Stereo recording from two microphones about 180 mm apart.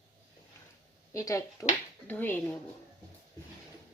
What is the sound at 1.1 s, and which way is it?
Speech, 20° left (ahead or behind).